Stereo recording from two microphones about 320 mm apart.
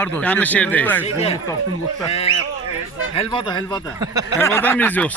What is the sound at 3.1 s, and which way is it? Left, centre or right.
Speech, centre.